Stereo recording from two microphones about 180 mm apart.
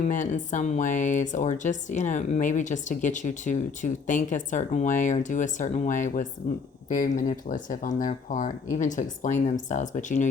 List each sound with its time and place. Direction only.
0.1 s speech: 45° left (ahead or behind)